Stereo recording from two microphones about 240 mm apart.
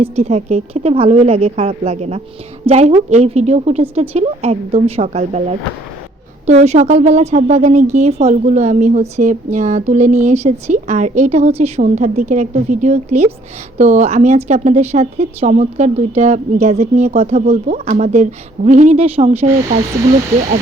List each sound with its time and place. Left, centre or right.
0.0 s a woman's voice: right